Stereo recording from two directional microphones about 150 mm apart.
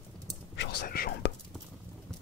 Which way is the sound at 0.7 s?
85° left.